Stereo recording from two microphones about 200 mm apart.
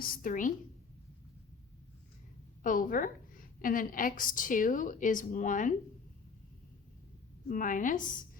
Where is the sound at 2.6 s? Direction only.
40° left (ahead or behind).